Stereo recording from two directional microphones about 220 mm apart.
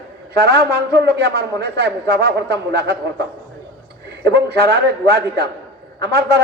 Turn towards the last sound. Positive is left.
turn(degrees=-50)  # may be behind; listen again after turning